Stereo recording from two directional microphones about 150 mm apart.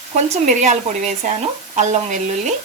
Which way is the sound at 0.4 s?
50° right (ahead or behind).